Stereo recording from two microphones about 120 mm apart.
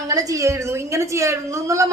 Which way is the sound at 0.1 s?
30° right (ahead or behind).